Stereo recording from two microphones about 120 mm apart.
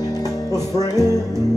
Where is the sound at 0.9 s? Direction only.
25° right (ahead or behind).